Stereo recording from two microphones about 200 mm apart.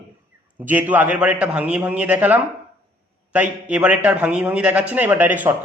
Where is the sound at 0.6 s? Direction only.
10° right (ahead or behind).